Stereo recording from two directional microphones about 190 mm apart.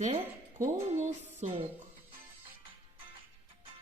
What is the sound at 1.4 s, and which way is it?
Speech, 35° right (ahead or behind).